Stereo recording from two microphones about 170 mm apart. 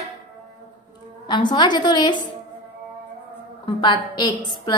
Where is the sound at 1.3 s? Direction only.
25° left (ahead or behind).